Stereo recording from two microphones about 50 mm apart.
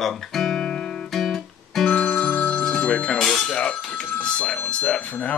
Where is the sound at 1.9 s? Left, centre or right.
Left.